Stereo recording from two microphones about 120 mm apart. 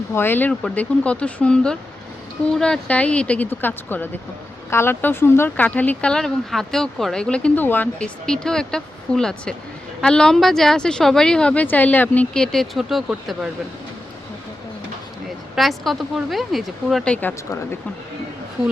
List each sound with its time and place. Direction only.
0.1 s a woman's voice: 20° left (ahead or behind); by 13.5 s 5° right (ahead or behind)
15.5 s a woman's voice: centre (ahead or behind)